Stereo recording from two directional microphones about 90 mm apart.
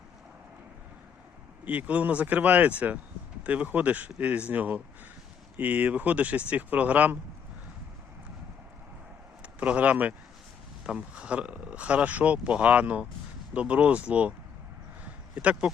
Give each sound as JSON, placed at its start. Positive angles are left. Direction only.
{"t": 1.6, "sound": "speech", "side_deg": -15}
{"t": 9.4, "sound": "speech", "side_deg": -15}
{"t": 15.0, "sound": "a sound", "side_deg": -15}